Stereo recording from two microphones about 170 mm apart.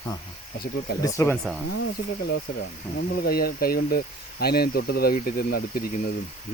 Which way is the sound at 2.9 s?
65° left (ahead or behind).